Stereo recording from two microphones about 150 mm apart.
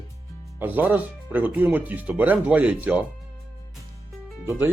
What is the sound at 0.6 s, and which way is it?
Speech, 10° right (ahead or behind).